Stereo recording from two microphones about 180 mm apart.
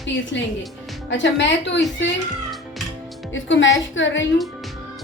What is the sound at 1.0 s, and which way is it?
Speech, 80° left.